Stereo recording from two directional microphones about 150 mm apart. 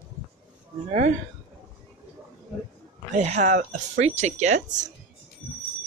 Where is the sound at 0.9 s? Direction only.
50° right (ahead or behind).